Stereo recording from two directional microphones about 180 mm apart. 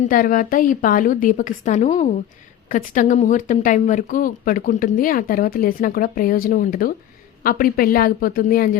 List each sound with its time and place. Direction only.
0.0 s a woman's voice: 50° left (ahead or behind)